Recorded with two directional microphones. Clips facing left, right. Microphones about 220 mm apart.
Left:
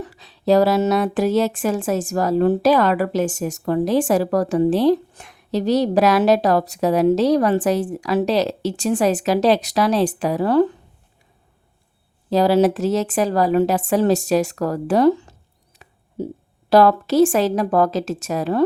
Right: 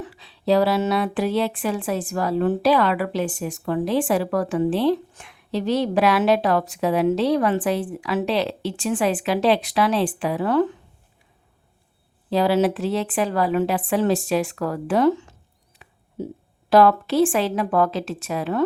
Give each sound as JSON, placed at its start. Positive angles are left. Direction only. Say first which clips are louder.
{"t": 0.0, "sound": "speech", "louder": "left 3 dB", "side_deg": 45}
{"t": 12.3, "sound": "a woman's voice", "louder": "left 4 dB", "side_deg": 40}